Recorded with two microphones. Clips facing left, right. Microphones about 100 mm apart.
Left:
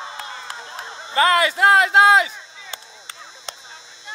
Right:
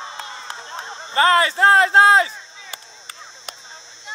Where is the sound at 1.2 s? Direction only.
35° right (ahead or behind).